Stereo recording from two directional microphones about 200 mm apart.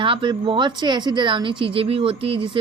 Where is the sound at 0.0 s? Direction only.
25° right (ahead or behind).